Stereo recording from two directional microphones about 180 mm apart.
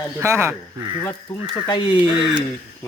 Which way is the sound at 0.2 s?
15° right (ahead or behind).